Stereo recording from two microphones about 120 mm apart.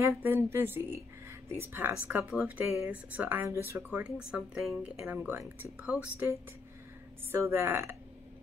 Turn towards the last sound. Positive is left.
turn(degrees=-20)  # may be behind; listen again after turning